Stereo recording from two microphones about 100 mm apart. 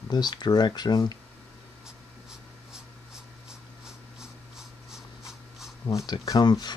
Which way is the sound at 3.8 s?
5° right (ahead or behind).